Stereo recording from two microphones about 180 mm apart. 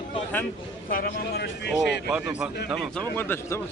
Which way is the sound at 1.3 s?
70° left (ahead or behind).